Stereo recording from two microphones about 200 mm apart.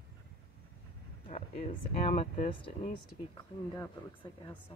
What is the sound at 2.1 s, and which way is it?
Speech, 30° left (ahead or behind).